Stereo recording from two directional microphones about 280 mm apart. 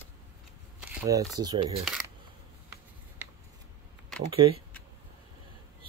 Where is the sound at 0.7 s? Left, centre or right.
Centre.